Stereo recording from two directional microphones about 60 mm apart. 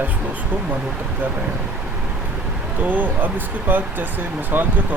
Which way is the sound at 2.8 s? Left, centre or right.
Right.